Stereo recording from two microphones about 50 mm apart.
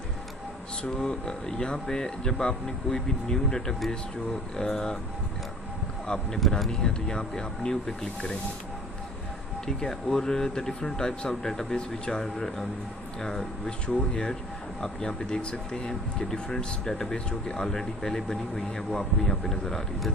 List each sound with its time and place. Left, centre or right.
0.8 s speech: centre
6.1 s speech: left
6.5 s speech: centre
9.6 s speech: centre